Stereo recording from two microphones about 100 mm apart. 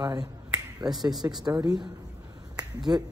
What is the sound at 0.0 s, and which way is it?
Speech, 40° right (ahead or behind).